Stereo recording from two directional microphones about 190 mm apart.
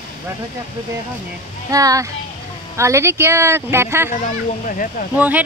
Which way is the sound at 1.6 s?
20° right (ahead or behind).